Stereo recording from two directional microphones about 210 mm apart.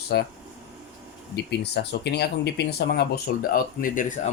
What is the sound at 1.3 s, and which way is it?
Speech, 50° left (ahead or behind).